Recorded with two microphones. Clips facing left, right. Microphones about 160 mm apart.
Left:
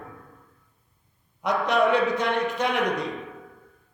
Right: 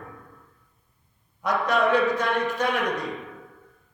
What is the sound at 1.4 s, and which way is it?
Speech, 20° left (ahead or behind).